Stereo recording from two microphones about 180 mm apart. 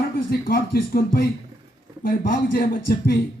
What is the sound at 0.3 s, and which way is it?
Speech, 55° left (ahead or behind).